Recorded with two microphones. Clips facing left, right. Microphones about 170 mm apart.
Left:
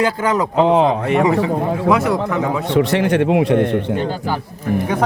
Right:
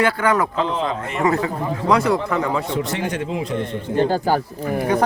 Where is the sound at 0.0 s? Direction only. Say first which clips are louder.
Left 1 dB; 20° left (ahead or behind).